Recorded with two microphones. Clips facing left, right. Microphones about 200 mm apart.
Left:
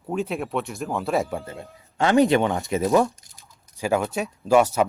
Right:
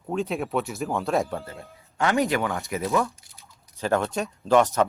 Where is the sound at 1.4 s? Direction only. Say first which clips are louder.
Left 3 dB; 20° left (ahead or behind); by 3.3 s 35° left (ahead or behind).